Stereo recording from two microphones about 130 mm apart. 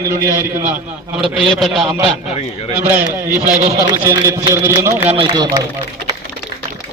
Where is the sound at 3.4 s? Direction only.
75° right (ahead or behind).